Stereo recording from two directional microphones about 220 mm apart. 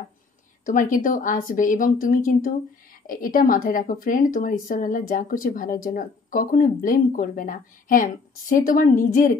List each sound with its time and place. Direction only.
0.7 s speech: 35° left (ahead or behind)